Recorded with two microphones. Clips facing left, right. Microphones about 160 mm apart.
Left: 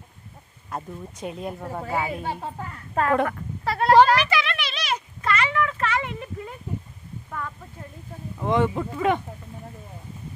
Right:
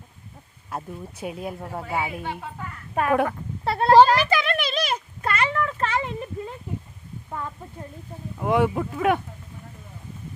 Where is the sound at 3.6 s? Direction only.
25° right (ahead or behind).